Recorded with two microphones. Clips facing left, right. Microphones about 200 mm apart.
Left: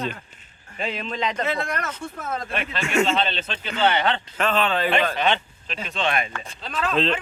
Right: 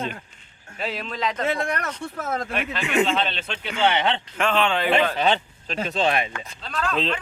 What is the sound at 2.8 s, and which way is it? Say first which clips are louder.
A man's voice: left 1 dB; 15° right (ahead or behind).